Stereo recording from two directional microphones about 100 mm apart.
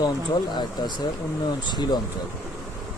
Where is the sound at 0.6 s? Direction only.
45° left (ahead or behind).